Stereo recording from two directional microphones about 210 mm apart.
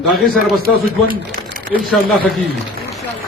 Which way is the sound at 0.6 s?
45° right (ahead or behind).